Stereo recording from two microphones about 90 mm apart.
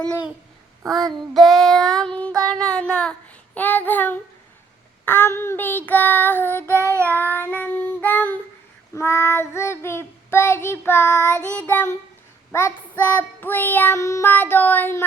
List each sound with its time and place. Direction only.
0.9 s child singing: centre (ahead or behind); by 11.1 s 25° left (ahead or behind)
11.2 s child singing: 30° right (ahead or behind)
11.5 s child singing: 20° left (ahead or behind)
14.0 s child singing: 35° left (ahead or behind)
14.3 s child singing: 25° left (ahead or behind)